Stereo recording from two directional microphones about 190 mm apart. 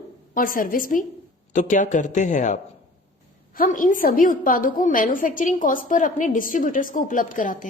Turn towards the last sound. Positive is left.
turn(degrees=45)  # may be behind; listen again after turning